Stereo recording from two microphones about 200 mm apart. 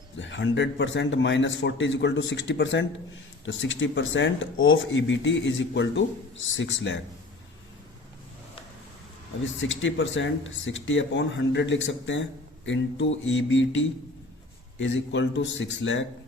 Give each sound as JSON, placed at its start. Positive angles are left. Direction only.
{"t": 0.2, "sound": "a man's voice", "side_deg": 65}
{"t": 9.4, "sound": "speech", "side_deg": 70}